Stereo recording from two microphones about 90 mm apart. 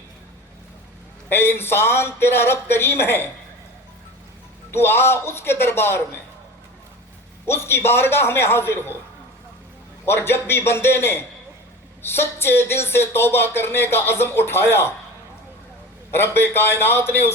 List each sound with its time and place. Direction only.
1.3 s speech: 25° left (ahead or behind)
4.7 s speech: 25° left (ahead or behind)
7.4 s speech: 25° left (ahead or behind)
10.1 s speech: 25° left (ahead or behind)
16.1 s speech: 25° left (ahead or behind)